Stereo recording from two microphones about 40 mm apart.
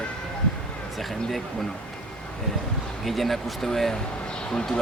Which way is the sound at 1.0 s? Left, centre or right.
Centre.